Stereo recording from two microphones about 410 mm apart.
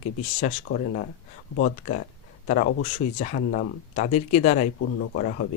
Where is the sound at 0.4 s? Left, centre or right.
Centre.